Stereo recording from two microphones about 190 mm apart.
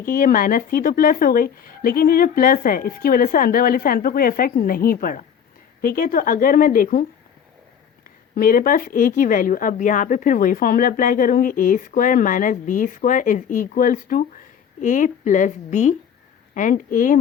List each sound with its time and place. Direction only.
0.0 s speech: 50° left (ahead or behind)
8.4 s a woman's voice: 50° left (ahead or behind)